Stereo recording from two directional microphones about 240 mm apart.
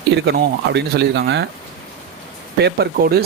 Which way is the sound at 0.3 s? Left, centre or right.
Right.